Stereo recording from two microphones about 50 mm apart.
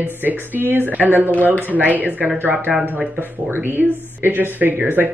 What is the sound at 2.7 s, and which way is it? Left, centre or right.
Speech, centre.